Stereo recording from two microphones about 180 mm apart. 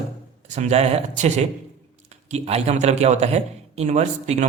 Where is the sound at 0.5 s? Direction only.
40° right (ahead or behind).